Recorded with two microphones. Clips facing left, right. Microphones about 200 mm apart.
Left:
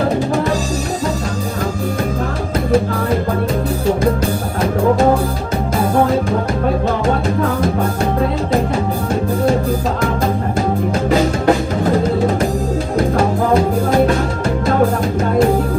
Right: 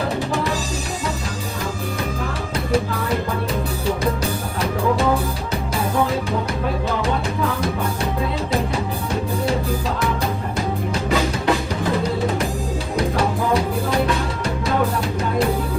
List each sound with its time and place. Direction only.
5.9 s music: 50° left (ahead or behind)
11.1 s music: 50° left (ahead or behind)